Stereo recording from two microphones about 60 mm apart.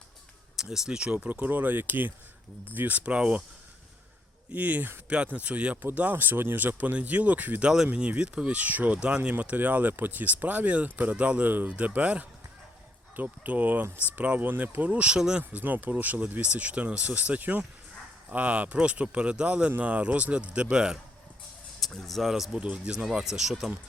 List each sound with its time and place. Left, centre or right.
0.5 s speech: centre
1.3 s speech: right
4.5 s speech: right; by 15.4 s centre
15.5 s speech: right
21.8 s speech: centre
22.5 s speech: right
22.8 s speech: centre